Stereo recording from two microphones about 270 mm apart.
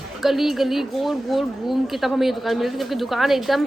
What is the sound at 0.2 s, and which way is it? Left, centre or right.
Speech, centre.